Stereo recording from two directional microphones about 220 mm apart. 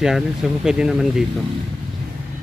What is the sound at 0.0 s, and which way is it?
Speech, centre (ahead or behind).